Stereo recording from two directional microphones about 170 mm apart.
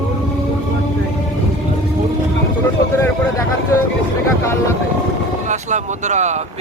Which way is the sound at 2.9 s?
15° left (ahead or behind).